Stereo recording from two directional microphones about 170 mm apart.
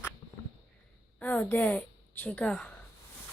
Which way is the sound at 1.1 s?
10° left (ahead or behind).